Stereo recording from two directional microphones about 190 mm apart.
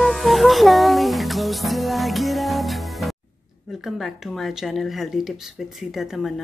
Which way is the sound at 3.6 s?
Centre (ahead or behind).